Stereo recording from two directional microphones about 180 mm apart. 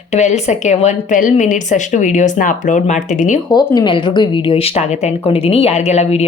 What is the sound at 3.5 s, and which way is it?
Speech, 25° left (ahead or behind).